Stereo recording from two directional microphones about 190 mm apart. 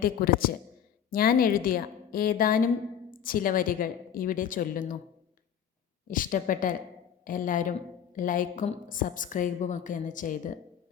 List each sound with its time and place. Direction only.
0.0 s a woman's voice: 50° left (ahead or behind)
6.1 s a woman's voice: 45° left (ahead or behind)